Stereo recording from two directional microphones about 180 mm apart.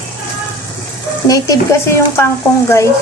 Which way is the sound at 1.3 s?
15° left (ahead or behind).